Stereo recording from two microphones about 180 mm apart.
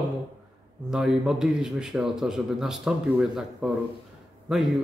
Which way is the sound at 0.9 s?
5° right (ahead or behind).